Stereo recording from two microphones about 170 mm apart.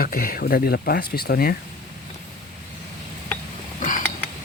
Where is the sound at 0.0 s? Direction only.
60° left (ahead or behind).